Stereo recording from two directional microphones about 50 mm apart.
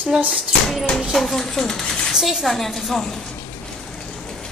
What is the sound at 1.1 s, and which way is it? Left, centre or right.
A woman's voice, centre.